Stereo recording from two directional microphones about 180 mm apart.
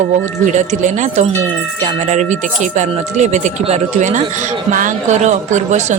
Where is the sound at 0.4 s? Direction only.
40° right (ahead or behind).